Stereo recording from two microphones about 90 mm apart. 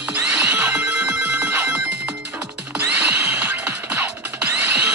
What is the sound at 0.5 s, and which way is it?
Telephone bell ringing, 20° right (ahead or behind).